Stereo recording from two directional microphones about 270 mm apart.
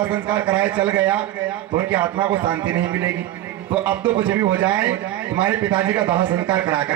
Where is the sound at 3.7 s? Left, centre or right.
Centre.